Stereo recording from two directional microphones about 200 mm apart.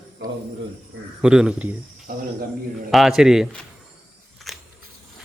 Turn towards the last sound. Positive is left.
turn(degrees=0)  # may be behind; listen again after turning